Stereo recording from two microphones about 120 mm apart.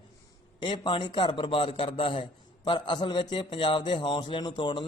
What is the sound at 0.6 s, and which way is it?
A man's voice, 45° left (ahead or behind).